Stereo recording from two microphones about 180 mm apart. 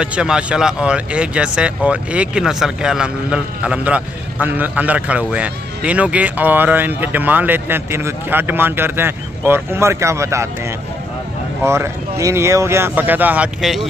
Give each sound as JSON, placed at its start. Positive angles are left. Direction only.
{"t": 0.0, "sound": "speech", "side_deg": -5}
{"t": 11.6, "sound": "speech", "side_deg": -15}